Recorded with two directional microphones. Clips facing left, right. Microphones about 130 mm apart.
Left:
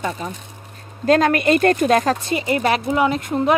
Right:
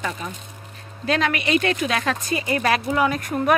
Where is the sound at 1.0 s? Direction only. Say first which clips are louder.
Left 7 dB; 45° left (ahead or behind).